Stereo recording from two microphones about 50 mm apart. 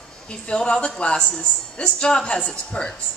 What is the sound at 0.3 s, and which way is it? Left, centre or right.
A woman's voice, centre.